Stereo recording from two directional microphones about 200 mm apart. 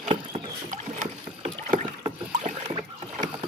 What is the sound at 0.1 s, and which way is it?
Rowboat, 35° right (ahead or behind).